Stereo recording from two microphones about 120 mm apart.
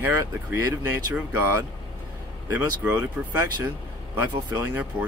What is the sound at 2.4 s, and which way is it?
Speech, 15° right (ahead or behind).